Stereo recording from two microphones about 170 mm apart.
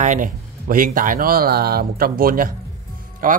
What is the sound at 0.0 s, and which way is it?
Speech, 50° right (ahead or behind).